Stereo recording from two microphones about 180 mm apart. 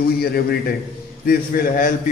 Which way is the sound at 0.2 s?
60° left (ahead or behind).